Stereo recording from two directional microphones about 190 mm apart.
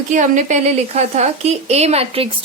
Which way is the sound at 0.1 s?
40° right (ahead or behind).